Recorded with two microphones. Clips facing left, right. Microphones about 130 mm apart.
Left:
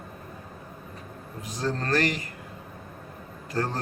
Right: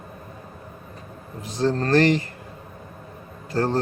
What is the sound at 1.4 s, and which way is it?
Speech, 30° right (ahead or behind).